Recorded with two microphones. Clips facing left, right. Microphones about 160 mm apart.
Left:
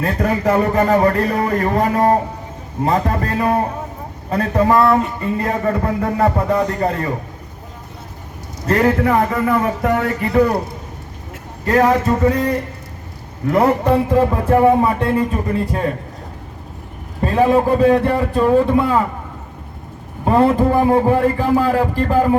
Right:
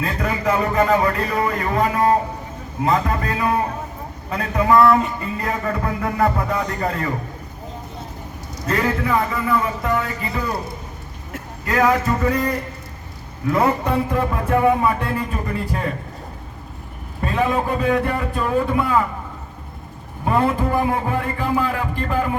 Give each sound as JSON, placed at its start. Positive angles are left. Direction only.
{"t": 0.2, "sound": "a man's voice", "side_deg": 40}
{"t": 8.6, "sound": "speech", "side_deg": 45}
{"t": 11.6, "sound": "a sound", "side_deg": 30}
{"t": 17.2, "sound": "a man's voice", "side_deg": 30}
{"t": 20.2, "sound": "a man's voice", "side_deg": 30}